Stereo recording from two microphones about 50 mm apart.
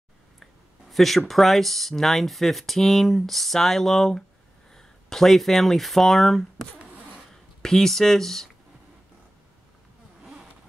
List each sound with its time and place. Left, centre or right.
0.4 s speech: centre